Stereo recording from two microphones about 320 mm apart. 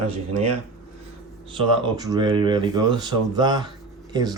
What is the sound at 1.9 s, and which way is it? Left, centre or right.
Speech, centre.